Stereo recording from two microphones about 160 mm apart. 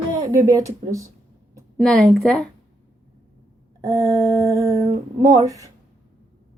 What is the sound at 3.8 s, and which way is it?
Speech, 20° right (ahead or behind).